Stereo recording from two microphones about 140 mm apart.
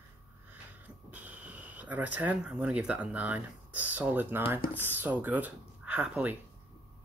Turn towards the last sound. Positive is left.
turn(degrees=-10)  # may be behind; listen again after turning